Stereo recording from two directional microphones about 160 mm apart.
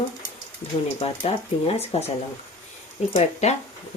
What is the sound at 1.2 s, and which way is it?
Speech, 40° left (ahead or behind).